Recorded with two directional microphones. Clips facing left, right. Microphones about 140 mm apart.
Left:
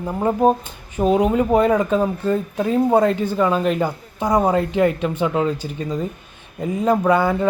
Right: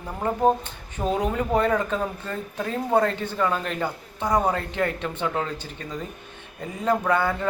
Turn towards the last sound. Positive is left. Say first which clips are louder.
# left 6 dB
turn(degrees=15)  # may be behind; listen again after turning